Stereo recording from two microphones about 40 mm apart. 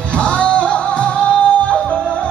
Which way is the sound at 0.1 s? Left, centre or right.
Left.